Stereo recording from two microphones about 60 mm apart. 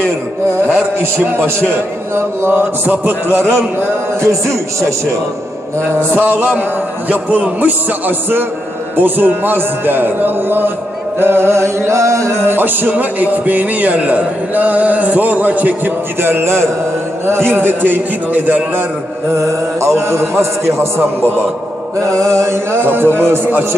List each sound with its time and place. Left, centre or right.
1.1 s speech: right
3.5 s a man's voice: right
6.1 s a man's voice: right
12.3 s speech: right
16.2 s a man's voice: right
17.5 s speech: right
19.3 s a man's voice: right
22.2 s a man's voice: right